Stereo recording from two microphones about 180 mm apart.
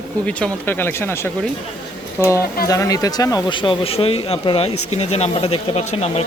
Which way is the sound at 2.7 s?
20° left (ahead or behind).